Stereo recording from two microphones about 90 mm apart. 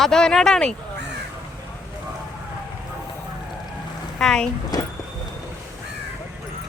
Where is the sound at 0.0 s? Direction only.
5° left (ahead or behind).